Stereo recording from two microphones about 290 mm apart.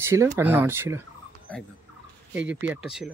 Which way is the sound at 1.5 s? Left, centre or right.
Centre.